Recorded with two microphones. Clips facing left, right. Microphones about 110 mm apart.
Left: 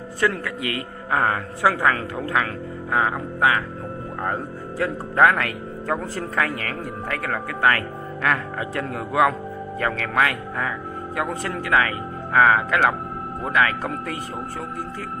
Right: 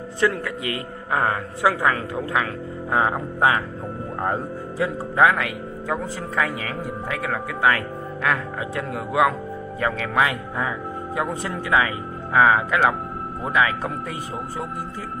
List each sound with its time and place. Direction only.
0.2 s a woman's voice: 20° right (ahead or behind)
4.2 s speech: 15° right (ahead or behind)